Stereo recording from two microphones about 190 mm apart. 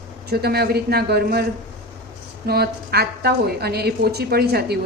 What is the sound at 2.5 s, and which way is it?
A woman's voice, 55° right (ahead or behind).